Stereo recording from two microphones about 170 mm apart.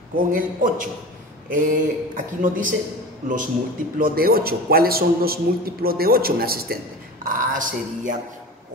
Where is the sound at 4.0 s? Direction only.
60° right (ahead or behind).